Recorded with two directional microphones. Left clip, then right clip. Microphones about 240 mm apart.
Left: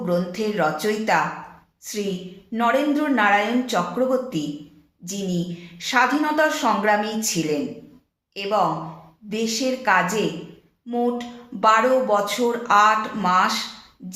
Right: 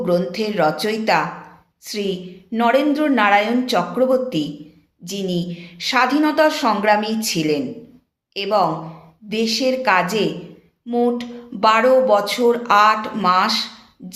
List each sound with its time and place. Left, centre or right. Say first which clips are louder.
0.0 s a woman's voice: right 4 dB; right
2.5 s a woman's voice: right 4 dB; right
10.8 s a sound: right 5 dB; right
11.6 s a woman's voice: right 3 dB; right